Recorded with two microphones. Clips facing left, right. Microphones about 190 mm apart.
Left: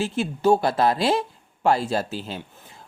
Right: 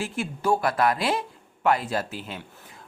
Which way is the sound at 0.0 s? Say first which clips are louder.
Left 6 dB; 25° left (ahead or behind).